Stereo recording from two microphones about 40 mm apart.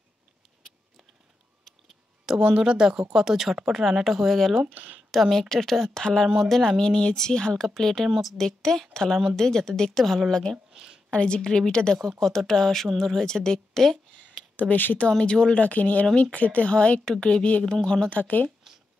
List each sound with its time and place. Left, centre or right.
2.4 s speech: right; by 4.6 s centre
4.7 s speech: right
5.1 s speech: centre
6.8 s a woman's voice: left; by 8.4 s centre
8.4 s speech: centre
10.3 s a woman's voice: centre
12.2 s speech: centre
14.6 s speech: left
15.0 s a woman's voice: left
15.6 s speech: left
17.0 s speech: centre
17.3 s a woman's voice: left
17.6 s speech: centre
18.1 s speech: left